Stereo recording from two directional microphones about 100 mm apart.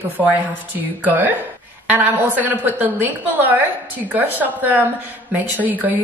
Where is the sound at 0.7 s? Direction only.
15° right (ahead or behind).